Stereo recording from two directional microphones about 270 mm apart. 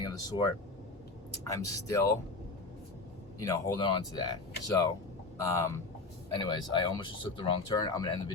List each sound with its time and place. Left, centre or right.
0.0 s speech: centre
1.6 s speech: centre
3.3 s speech: centre